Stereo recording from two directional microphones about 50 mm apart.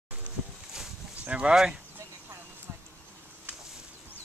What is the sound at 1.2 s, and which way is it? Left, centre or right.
Speech, right.